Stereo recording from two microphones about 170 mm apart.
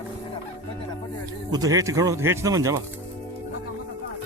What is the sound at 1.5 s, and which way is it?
Speech, 20° right (ahead or behind).